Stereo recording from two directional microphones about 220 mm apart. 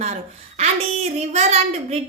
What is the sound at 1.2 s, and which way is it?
Speech, 30° right (ahead or behind).